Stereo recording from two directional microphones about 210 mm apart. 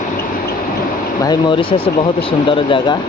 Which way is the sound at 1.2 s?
20° left (ahead or behind).